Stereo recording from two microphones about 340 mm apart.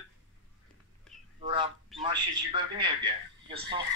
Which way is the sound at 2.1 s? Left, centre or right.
Centre.